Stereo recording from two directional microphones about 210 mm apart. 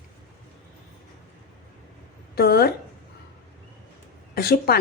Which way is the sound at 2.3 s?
45° left (ahead or behind).